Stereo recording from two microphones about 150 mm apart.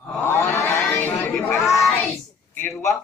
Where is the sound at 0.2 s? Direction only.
15° left (ahead or behind).